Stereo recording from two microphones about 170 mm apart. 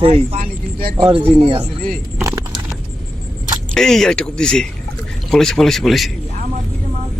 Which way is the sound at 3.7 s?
Centre (ahead or behind).